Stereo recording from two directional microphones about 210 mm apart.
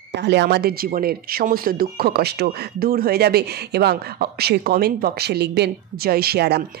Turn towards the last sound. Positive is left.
turn(degrees=-50)  # may be behind; listen again after turning